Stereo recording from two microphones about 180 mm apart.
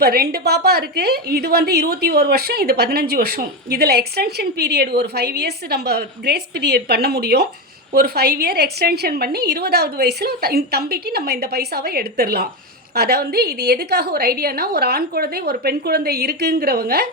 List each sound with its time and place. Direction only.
0.0 s a woman's voice: 60° right (ahead or behind)